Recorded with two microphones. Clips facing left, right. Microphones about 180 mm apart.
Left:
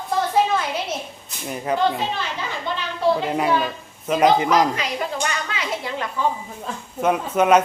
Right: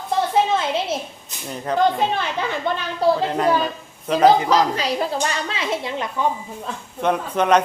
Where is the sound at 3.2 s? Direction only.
10° left (ahead or behind).